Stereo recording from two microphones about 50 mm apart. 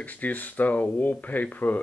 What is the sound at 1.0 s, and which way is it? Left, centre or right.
Speech, left.